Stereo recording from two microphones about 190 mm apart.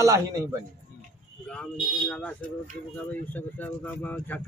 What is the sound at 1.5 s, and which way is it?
Speech, 5° left (ahead or behind).